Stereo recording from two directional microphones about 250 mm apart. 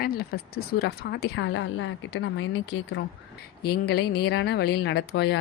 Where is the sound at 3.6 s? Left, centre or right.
Left.